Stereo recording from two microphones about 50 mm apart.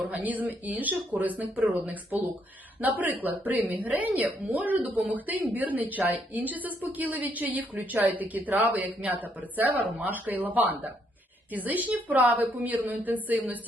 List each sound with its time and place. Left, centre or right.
0.0 s speech: right